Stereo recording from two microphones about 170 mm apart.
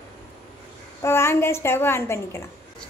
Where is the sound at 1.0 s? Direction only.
15° left (ahead or behind).